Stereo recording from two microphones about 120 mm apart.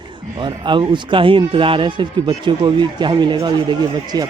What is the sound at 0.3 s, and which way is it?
A man's voice, 40° right (ahead or behind).